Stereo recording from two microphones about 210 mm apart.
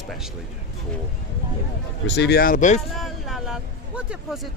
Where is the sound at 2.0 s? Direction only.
55° left (ahead or behind); by 2.8 s 35° left (ahead or behind).